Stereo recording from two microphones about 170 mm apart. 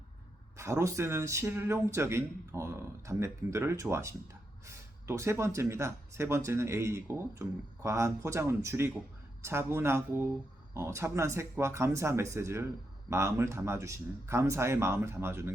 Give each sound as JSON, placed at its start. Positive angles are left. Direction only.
{"t": 0.5, "sound": "speech", "side_deg": -15}